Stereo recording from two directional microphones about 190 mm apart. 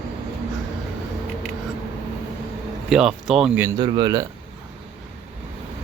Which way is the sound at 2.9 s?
5° right (ahead or behind).